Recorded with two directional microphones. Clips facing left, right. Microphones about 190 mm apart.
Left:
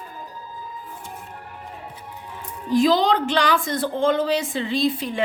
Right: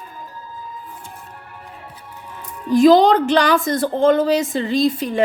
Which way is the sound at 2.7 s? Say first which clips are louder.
Right 7 dB; 45° right (ahead or behind).